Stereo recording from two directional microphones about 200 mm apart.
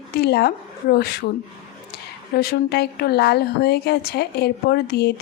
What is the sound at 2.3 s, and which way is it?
Speech, 55° left (ahead or behind).